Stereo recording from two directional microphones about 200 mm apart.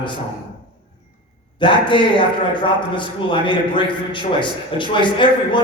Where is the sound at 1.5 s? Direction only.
25° left (ahead or behind).